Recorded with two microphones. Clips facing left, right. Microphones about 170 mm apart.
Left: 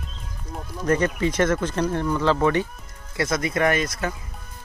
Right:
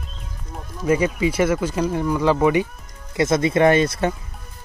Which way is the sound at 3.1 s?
25° right (ahead or behind).